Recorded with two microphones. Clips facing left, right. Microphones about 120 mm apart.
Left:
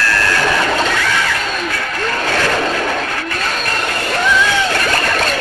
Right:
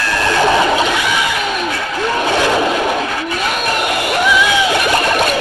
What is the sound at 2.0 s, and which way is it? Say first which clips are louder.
Vehicle: right 3 dB; 15° right (ahead or behind).